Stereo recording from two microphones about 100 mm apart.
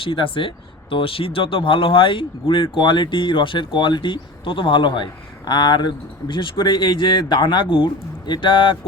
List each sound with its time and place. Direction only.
0.0 s speech: 60° left (ahead or behind)